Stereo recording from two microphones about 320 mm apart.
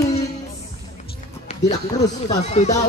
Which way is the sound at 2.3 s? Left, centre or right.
Centre.